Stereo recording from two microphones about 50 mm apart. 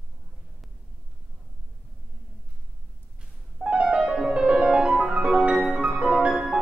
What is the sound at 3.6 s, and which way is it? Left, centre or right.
Music, right.